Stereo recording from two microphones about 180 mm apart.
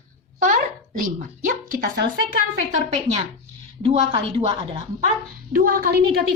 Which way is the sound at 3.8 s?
35° right (ahead or behind).